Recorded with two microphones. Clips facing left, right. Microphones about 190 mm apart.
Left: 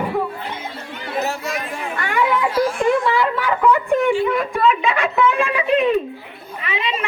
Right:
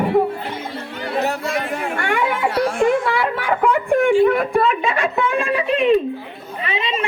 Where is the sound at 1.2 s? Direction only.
60° right (ahead or behind).